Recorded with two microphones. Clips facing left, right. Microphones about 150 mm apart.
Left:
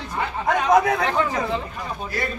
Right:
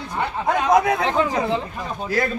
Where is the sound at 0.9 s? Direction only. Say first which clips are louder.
Right 2 dB; 20° right (ahead or behind).